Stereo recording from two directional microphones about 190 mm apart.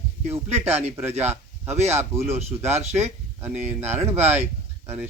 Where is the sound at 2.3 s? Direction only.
35° right (ahead or behind).